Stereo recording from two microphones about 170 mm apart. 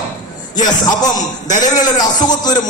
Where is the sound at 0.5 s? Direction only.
25° left (ahead or behind).